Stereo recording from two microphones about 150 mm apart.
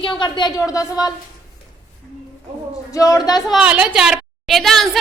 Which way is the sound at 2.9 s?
20° left (ahead or behind).